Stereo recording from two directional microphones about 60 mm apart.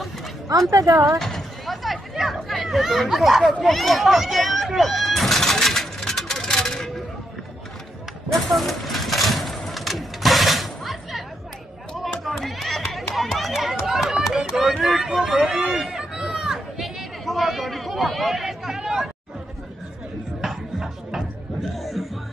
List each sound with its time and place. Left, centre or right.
0.5 s speech: right
1.2 s chatter: centre
3.6 s a sound: centre
8.3 s vehicle: centre
12.0 s a sound: centre
14.8 s run: centre
20.4 s music: centre